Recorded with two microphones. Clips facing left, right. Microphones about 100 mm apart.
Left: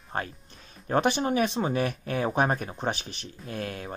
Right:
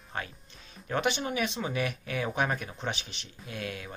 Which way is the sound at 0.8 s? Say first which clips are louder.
Left 5 dB; 40° left (ahead or behind).